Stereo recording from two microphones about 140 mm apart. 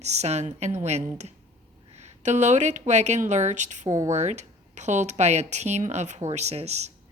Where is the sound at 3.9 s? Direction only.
25° right (ahead or behind).